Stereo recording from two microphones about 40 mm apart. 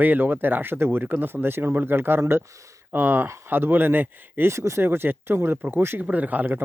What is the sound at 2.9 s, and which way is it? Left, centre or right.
Speech, right.